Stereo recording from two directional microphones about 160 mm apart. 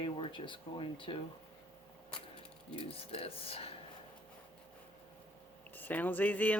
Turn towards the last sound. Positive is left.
turn(degrees=10)  # may be behind; listen again after turning